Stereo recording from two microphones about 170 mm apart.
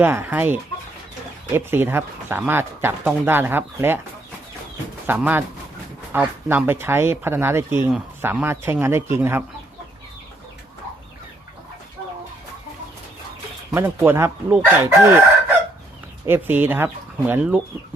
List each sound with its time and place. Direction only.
0.0 s speech: 15° right (ahead or behind)
5.0 s speech: 10° right (ahead or behind)
13.7 s speech: 10° right (ahead or behind)
16.2 s speech: 10° right (ahead or behind)